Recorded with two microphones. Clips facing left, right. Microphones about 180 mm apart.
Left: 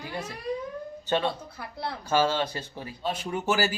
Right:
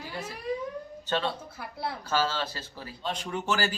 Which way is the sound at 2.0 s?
15° left (ahead or behind).